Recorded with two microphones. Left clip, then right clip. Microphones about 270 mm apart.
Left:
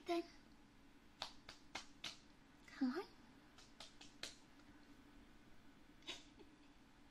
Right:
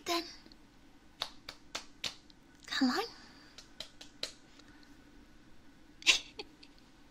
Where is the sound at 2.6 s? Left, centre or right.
Right.